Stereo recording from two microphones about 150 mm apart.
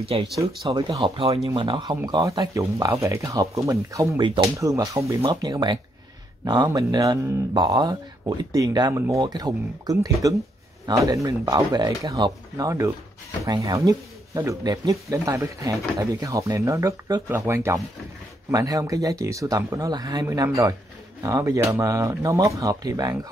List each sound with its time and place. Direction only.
0.1 s speech: 35° right (ahead or behind)